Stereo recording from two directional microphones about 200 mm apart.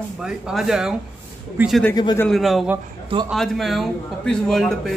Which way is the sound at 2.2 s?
Centre (ahead or behind).